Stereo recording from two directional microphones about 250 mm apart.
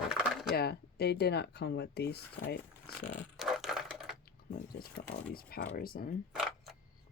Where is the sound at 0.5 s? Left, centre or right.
Left.